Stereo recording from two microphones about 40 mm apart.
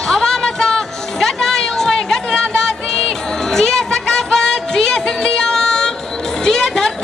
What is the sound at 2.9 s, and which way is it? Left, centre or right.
Music, centre.